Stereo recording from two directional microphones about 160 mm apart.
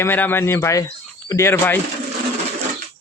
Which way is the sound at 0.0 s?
15° left (ahead or behind).